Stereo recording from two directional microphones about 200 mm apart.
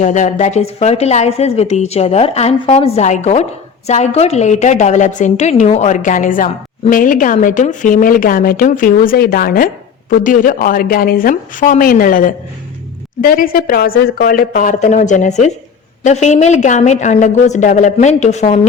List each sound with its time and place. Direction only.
0.0 s a woman's voice: 40° left (ahead or behind)